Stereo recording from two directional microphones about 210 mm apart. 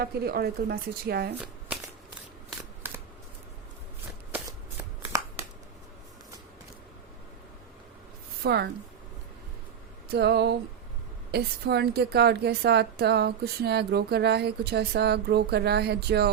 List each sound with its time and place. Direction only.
0.0 s a woman's voice: 45° right (ahead or behind)
1.4 s shuffling cards: 5° right (ahead or behind)
4.8 s shuffling cards: 15° right (ahead or behind)
8.4 s a woman's voice: 50° right (ahead or behind)
10.1 s a woman's voice: 50° right (ahead or behind)